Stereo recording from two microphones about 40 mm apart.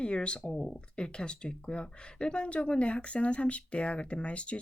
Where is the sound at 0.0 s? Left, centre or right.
Left.